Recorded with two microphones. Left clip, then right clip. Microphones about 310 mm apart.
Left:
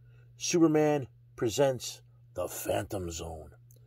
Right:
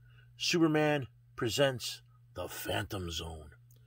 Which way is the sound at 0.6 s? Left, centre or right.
Right.